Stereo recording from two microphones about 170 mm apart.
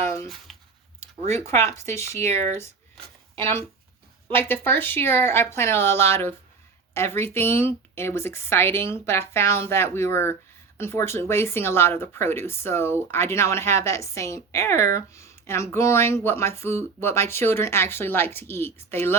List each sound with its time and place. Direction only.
0.0 s a sound: 15° left (ahead or behind)
0.3 s speech: centre (ahead or behind)
1.5 s speech: 15° left (ahead or behind)
2.2 s speech: 40° right (ahead or behind)
3.3 s speech: 15° left (ahead or behind)